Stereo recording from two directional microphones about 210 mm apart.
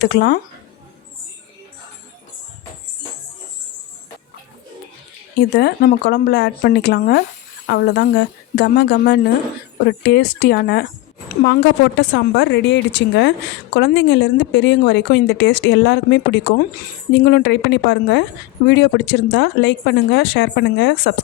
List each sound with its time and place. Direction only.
0.0 s speech: 50° left (ahead or behind)
5.5 s speech: 50° left (ahead or behind)